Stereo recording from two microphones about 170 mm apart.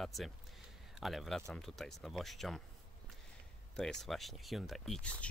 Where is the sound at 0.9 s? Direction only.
Centre (ahead or behind).